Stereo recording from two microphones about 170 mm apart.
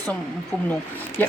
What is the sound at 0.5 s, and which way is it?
Speech, 5° left (ahead or behind).